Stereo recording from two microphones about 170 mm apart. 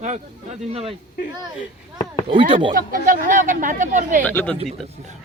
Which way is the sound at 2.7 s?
55° right (ahead or behind).